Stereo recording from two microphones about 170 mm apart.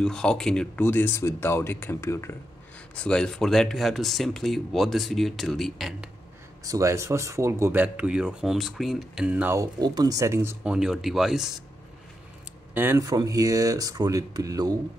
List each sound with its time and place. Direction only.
0.0 s speech: 5° left (ahead or behind)
3.0 s speech: 5° left (ahead or behind)
6.6 s speech: 20° right (ahead or behind)
9.8 s speech: 25° right (ahead or behind); by 11.6 s centre (ahead or behind)
12.7 s speech: 15° right (ahead or behind)